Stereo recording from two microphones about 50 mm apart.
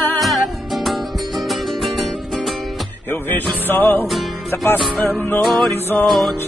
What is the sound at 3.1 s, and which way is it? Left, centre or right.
Music, left.